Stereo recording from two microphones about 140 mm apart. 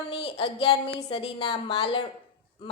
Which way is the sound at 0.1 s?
40° left (ahead or behind).